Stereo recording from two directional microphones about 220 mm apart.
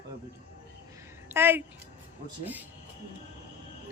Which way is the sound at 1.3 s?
10° right (ahead or behind).